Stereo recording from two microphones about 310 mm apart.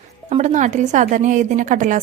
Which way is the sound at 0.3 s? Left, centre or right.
Right.